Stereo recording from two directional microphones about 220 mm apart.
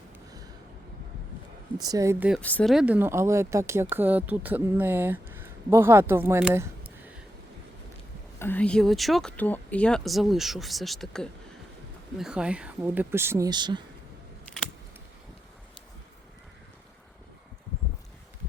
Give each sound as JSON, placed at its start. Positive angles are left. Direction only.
{"t": 1.8, "sound": "speech", "side_deg": -15}
{"t": 2.4, "sound": "speech", "side_deg": 5}
{"t": 8.4, "sound": "speech", "side_deg": 10}